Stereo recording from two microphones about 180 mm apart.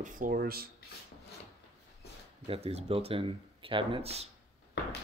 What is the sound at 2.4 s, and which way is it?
Speech, 35° right (ahead or behind).